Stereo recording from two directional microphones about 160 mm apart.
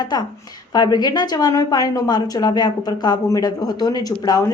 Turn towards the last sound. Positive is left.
turn(degrees=20)  # may be behind; listen again after turning